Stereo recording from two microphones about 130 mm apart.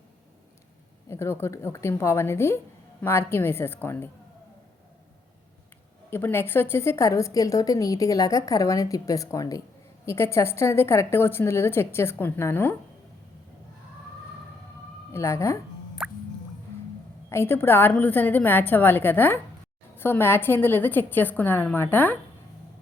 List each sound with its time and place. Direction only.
1.0 s a woman's voice: 20° left (ahead or behind)
6.1 s a woman's voice: 15° left (ahead or behind)
15.1 s a woman's voice: 20° left (ahead or behind)
16.0 s music: 5° right (ahead or behind)
17.2 s a woman's voice: 20° left (ahead or behind)